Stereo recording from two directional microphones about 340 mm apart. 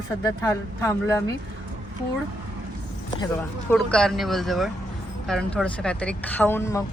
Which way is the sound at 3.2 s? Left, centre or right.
Centre.